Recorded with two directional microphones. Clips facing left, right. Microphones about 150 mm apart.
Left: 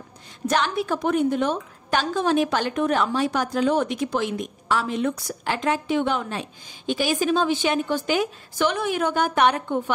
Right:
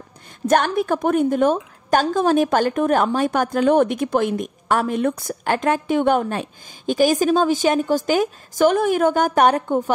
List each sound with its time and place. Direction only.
0.5 s a woman's voice: 50° right (ahead or behind)